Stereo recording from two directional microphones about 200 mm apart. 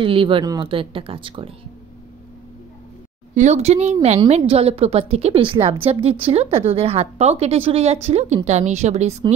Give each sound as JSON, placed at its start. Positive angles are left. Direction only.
{"t": 0.0, "sound": "speech", "side_deg": -25}
{"t": 3.3, "sound": "a woman's voice", "side_deg": -35}